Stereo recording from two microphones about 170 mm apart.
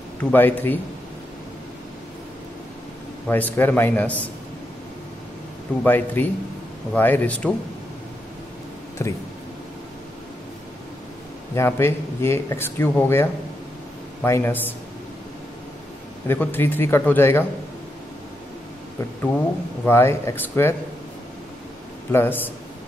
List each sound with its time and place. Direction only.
0.2 s speech: 10° left (ahead or behind)
3.3 s speech: 10° left (ahead or behind)
5.9 s speech: 10° left (ahead or behind)
9.0 s speech: 15° left (ahead or behind)
11.5 s speech: 15° left (ahead or behind)
16.3 s speech: 10° left (ahead or behind)
19.8 s speech: 15° left (ahead or behind)
22.1 s speech: 10° left (ahead or behind)